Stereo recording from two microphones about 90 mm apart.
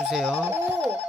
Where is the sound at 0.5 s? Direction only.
25° right (ahead or behind).